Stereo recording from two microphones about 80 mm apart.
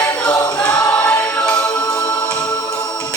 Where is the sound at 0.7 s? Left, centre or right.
Centre.